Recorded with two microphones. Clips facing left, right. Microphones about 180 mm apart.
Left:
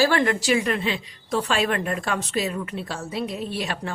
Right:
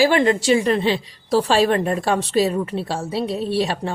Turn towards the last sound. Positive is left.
turn(degrees=-30)  # may be behind; listen again after turning